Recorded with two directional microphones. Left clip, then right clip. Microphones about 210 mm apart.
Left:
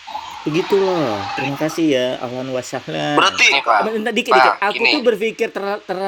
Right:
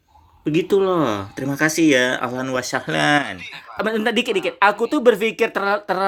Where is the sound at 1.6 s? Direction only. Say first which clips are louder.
Right 3 dB; 5° left (ahead or behind).